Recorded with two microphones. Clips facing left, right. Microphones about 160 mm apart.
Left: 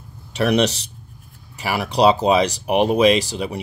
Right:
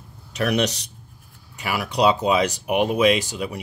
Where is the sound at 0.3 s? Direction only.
30° left (ahead or behind).